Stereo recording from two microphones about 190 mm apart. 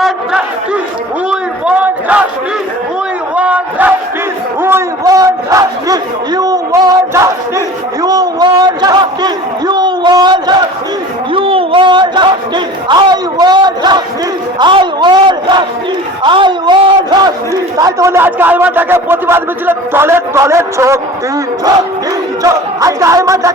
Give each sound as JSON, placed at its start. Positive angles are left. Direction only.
{"t": 0.0, "sound": "crowd", "side_deg": -5}
{"t": 1.3, "sound": "a sound", "side_deg": -5}
{"t": 3.3, "sound": "crowd", "side_deg": -10}
{"t": 4.6, "sound": "a man's voice", "side_deg": -15}
{"t": 22.4, "sound": "speech", "side_deg": -15}